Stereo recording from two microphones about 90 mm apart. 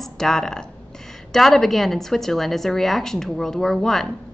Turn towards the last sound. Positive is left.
turn(degrees=5)  # may be behind; listen again after turning